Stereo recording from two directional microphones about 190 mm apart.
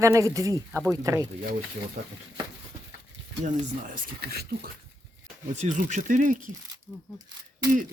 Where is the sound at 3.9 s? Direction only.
50° right (ahead or behind).